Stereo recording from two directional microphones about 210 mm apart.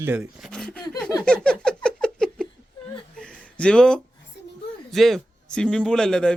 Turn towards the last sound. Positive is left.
turn(degrees=5)  # may be behind; listen again after turning